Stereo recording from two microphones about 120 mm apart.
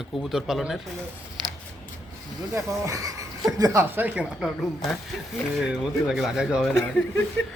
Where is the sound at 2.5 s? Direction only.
25° right (ahead or behind); by 4.5 s 10° right (ahead or behind).